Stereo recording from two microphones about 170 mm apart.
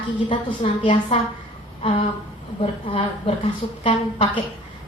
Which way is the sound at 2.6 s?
35° left (ahead or behind).